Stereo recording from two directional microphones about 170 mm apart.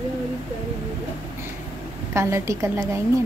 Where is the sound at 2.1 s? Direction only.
15° right (ahead or behind).